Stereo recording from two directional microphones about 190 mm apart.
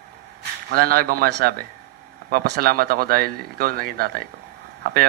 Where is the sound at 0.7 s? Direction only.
50° right (ahead or behind).